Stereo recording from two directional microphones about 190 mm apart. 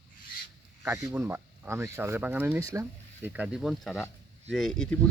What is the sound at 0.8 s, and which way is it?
Speech, 15° right (ahead or behind).